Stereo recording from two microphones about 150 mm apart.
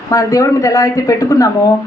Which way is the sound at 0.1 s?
25° left (ahead or behind).